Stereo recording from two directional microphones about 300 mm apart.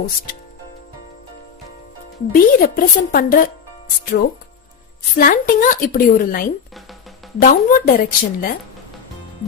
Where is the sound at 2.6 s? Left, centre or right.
Left.